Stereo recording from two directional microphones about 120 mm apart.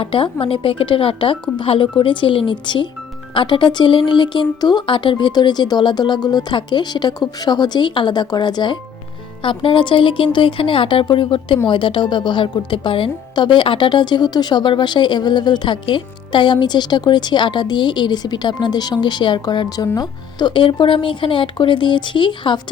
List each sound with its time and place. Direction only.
0.0 s a woman's voice: 45° left (ahead or behind)